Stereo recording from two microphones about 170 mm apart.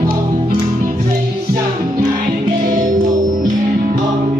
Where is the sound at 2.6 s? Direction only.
50° right (ahead or behind).